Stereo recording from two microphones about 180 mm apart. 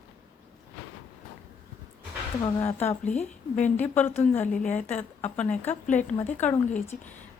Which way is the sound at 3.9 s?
10° left (ahead or behind).